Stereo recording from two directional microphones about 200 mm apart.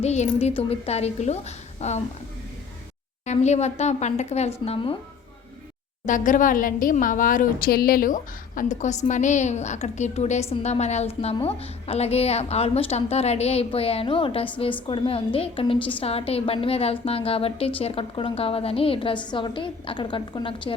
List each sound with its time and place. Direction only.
0.0 s a woman's voice: 35° left (ahead or behind)
3.2 s a woman's voice: 35° left (ahead or behind)
6.1 s a woman's voice: 40° left (ahead or behind)